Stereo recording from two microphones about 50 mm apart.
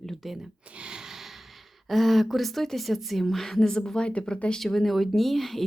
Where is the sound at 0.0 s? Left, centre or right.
Centre.